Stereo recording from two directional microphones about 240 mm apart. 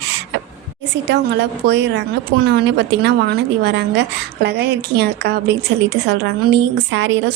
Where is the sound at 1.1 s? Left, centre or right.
Right.